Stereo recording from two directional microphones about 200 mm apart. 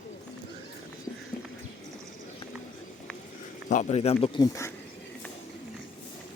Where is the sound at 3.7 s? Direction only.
35° left (ahead or behind); by 4.7 s 15° left (ahead or behind).